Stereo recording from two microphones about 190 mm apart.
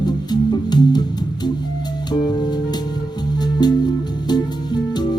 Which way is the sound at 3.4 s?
20° left (ahead or behind).